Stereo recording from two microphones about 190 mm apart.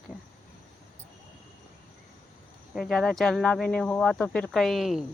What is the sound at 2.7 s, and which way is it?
Speech, centre (ahead or behind).